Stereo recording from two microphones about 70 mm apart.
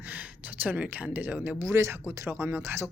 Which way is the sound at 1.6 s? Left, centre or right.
Right.